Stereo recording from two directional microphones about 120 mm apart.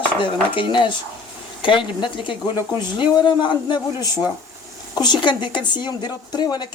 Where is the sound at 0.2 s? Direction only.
45° left (ahead or behind).